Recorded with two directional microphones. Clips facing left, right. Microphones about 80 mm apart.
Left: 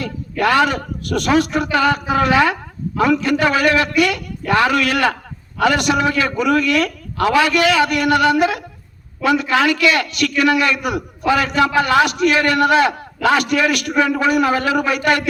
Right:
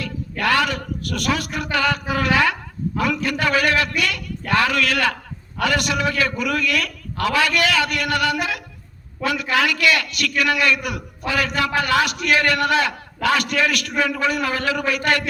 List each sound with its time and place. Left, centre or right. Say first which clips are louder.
0.0 s a man's voice: left 5 dB; left